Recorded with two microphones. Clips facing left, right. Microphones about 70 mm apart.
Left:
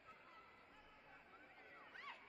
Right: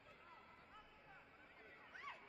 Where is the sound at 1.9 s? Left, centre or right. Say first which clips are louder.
Right 2 dB; centre.